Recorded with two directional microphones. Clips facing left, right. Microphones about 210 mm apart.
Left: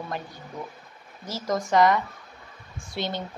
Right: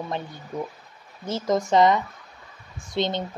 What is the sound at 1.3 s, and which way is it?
A woman's voice, 25° right (ahead or behind).